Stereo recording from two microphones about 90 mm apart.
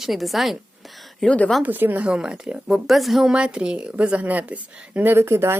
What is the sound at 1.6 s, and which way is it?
A woman's voice, 20° right (ahead or behind).